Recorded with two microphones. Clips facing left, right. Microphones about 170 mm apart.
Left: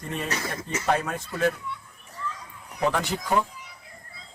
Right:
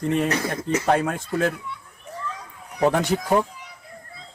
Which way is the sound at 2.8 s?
45° right (ahead or behind).